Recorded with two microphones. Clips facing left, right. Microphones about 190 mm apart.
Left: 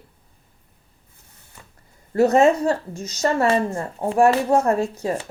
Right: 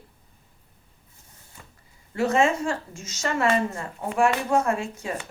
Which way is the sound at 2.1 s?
40° left (ahead or behind).